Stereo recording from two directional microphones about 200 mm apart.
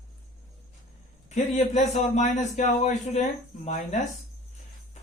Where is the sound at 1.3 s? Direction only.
35° left (ahead or behind).